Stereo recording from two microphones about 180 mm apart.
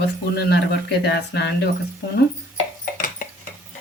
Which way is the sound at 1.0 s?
70° left (ahead or behind).